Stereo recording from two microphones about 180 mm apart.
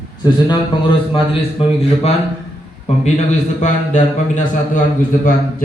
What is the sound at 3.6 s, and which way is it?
Speech, 40° left (ahead or behind).